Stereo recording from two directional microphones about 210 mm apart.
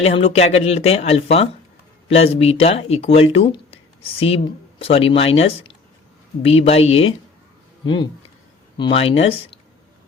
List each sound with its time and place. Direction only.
0.0 s speech: 30° left (ahead or behind)
8.8 s speech: 30° left (ahead or behind)